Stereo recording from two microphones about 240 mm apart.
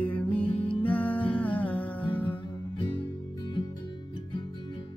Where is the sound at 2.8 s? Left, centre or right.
Centre.